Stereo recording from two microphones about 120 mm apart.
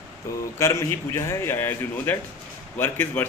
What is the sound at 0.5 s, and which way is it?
A man's voice, 25° left (ahead or behind).